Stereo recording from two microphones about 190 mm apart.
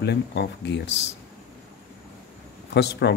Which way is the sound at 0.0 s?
60° left (ahead or behind).